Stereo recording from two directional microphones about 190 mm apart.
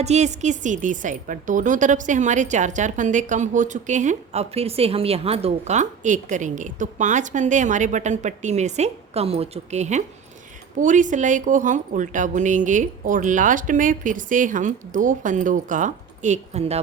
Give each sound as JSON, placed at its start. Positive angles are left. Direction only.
{"t": 0.0, "sound": "a woman's voice", "side_deg": -35}